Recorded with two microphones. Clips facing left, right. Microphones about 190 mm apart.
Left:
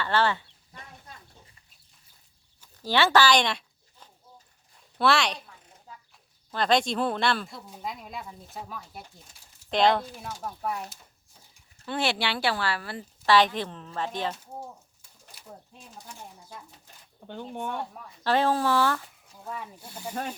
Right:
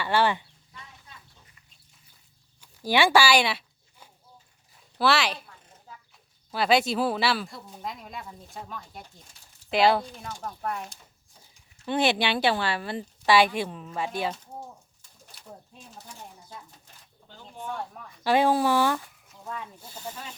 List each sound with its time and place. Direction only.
0.0 s a woman's voice: 15° right (ahead or behind)
0.7 s a sound: 45° left (ahead or behind)
2.6 s chicken: 10° right (ahead or behind)
4.9 s a woman's voice: centre (ahead or behind)
9.6 s speech: 5° right (ahead or behind)
10.0 s speech: 5° left (ahead or behind)
11.9 s a woman's voice: 20° right (ahead or behind)
17.2 s speech: 65° left (ahead or behind)
18.2 s a woman's voice: 15° right (ahead or behind)
19.5 s speech: 10° left (ahead or behind)